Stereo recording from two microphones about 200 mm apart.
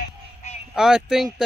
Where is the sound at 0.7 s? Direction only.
5° right (ahead or behind).